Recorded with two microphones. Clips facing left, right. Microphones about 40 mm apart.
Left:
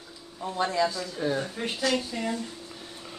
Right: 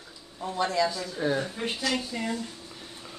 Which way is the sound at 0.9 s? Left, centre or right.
Centre.